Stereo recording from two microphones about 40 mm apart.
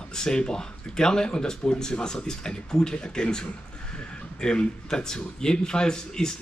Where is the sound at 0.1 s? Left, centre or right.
Centre.